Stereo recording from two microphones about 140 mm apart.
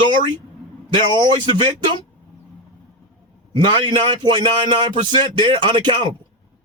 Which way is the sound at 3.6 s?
35° right (ahead or behind).